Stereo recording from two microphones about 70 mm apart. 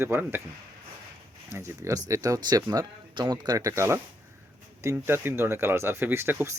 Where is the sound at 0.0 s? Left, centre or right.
Right.